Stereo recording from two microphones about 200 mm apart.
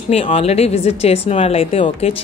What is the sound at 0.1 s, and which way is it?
A woman's voice, 30° left (ahead or behind).